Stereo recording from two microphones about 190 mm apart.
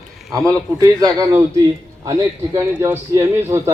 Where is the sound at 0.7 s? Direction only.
20° right (ahead or behind).